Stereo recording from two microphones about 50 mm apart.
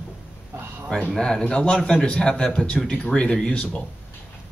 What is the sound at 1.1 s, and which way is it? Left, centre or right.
Speech, centre.